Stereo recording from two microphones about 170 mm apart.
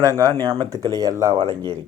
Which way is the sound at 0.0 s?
20° right (ahead or behind).